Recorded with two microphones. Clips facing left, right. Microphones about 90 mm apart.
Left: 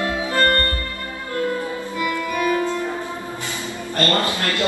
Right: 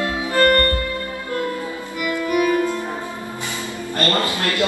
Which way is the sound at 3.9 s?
20° right (ahead or behind).